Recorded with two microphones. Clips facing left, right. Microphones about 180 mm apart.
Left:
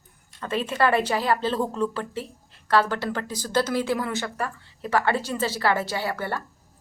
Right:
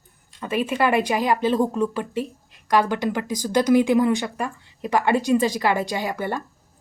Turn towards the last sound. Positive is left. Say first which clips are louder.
# right 2 dB
turn(degrees=-15)  # may be behind; listen again after turning